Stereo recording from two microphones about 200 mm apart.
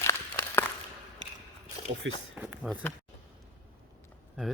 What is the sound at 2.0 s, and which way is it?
Speech, 70° right (ahead or behind).